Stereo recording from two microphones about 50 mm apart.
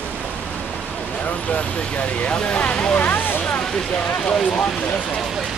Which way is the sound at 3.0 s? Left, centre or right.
Left.